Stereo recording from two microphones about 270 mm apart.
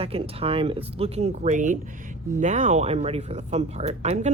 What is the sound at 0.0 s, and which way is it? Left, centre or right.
Speech, right.